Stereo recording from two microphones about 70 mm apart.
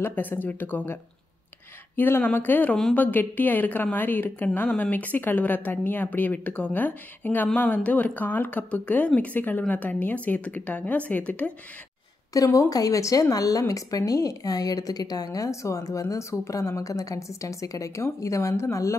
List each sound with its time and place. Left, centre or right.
0.0 s speech: left
2.0 s speech: left
2.7 s speech: centre
12.4 s a woman's voice: left